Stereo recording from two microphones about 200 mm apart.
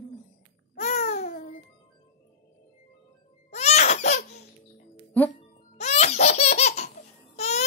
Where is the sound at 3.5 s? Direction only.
35° left (ahead or behind).